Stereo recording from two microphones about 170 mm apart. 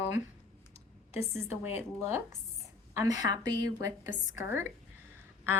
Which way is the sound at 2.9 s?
20° right (ahead or behind).